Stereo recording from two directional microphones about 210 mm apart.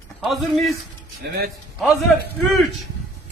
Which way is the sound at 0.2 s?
Centre (ahead or behind).